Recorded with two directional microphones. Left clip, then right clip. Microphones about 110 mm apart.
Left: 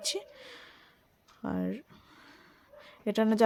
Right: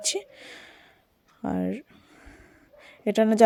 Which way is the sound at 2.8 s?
30° right (ahead or behind).